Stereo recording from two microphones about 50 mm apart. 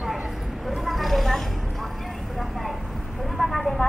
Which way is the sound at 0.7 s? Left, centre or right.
Centre.